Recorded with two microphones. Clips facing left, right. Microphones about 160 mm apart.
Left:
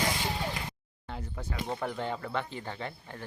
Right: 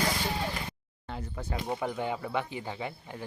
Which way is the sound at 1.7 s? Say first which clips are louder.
Right 2 dB; 10° right (ahead or behind).